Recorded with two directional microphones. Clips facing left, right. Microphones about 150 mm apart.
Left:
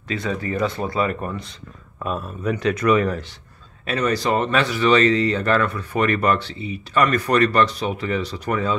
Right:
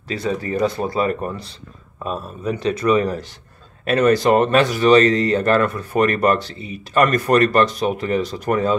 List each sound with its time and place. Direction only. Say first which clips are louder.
0.1 s speech: right 2 dB; 35° right (ahead or behind)
3.8 s speech: right 6 dB; 55° right (ahead or behind)